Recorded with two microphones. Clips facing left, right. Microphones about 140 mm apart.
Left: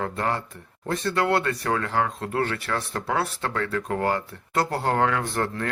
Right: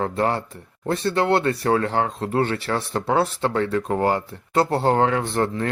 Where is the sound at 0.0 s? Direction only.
30° right (ahead or behind).